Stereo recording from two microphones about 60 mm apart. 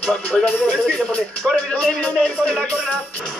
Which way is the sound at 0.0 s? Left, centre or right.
Centre.